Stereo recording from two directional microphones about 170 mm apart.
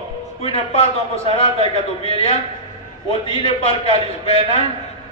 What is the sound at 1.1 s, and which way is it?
A man's voice, 35° left (ahead or behind).